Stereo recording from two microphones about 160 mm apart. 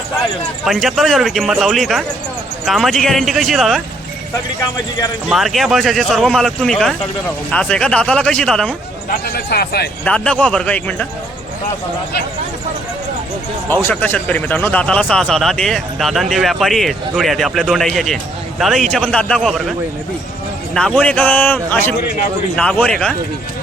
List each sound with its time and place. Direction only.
0.6 s speech: centre (ahead or behind)
5.3 s a man's voice: centre (ahead or behind)
9.0 s speech: 75° left (ahead or behind)
10.0 s a man's voice: 5° left (ahead or behind)
13.7 s speech: 10° left (ahead or behind)
20.7 s a man's voice: 5° left (ahead or behind)